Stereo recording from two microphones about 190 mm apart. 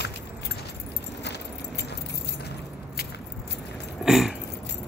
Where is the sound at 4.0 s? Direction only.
Centre (ahead or behind).